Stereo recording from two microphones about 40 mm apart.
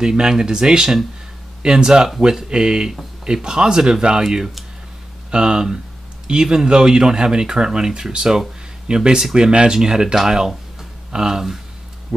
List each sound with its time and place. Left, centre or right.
0.0 s speech: centre